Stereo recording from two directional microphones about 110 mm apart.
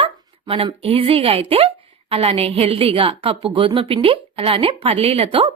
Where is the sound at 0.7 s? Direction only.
60° right (ahead or behind).